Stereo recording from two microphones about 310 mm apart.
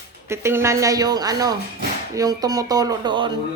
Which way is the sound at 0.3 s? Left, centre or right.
Centre.